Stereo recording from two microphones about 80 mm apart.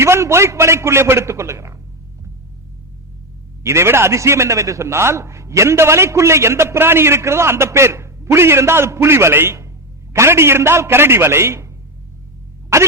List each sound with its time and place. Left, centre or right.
0.0 s a man's voice: right
3.6 s a man's voice: right
12.7 s a man's voice: right